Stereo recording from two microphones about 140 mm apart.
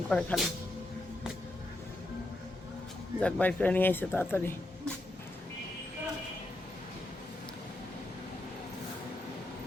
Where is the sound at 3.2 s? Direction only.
10° left (ahead or behind).